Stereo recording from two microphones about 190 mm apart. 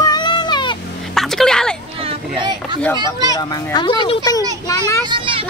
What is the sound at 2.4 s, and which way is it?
Speech, 25° right (ahead or behind).